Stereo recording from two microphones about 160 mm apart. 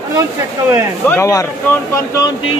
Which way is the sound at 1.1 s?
20° left (ahead or behind).